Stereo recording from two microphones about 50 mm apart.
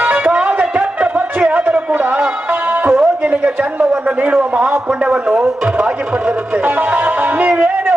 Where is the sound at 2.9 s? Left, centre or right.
Right.